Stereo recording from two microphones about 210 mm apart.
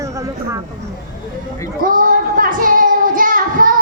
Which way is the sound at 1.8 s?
40° right (ahead or behind).